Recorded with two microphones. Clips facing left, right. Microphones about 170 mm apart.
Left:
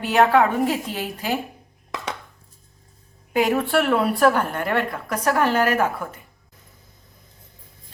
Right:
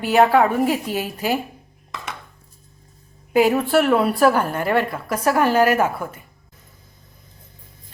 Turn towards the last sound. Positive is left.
turn(degrees=-10)  # may be behind; listen again after turning